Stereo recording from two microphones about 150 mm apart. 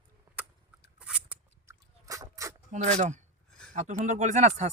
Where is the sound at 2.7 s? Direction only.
50° right (ahead or behind).